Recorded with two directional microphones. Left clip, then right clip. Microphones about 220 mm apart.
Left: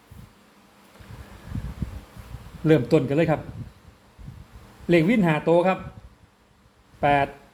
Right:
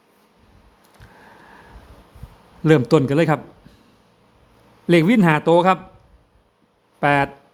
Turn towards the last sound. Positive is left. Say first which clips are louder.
# right 3 dB
turn(degrees=-30)  # may be behind; listen again after turning